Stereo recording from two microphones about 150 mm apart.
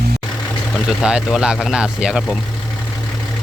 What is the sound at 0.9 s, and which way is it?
Speech, 5° right (ahead or behind).